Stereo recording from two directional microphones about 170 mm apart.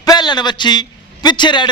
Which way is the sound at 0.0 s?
25° left (ahead or behind).